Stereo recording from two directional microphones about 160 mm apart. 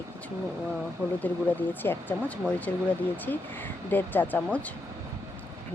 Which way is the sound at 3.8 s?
10° left (ahead or behind).